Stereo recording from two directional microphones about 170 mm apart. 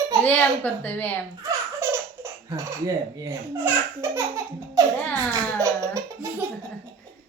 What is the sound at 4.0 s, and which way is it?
Speech, 20° right (ahead or behind).